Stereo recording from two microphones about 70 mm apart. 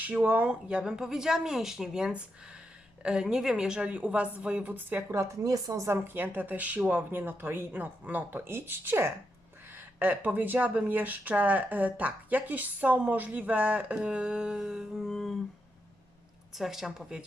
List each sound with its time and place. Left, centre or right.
0.0 s speech: right
0.8 s speech: centre
4.7 s a woman's voice: right
5.9 s speech: right; by 15.4 s centre
16.6 s speech: centre